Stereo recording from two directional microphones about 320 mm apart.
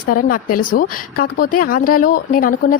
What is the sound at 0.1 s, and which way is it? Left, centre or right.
A woman's voice, left.